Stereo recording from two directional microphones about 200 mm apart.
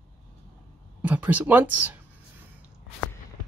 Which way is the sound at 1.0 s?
5° right (ahead or behind).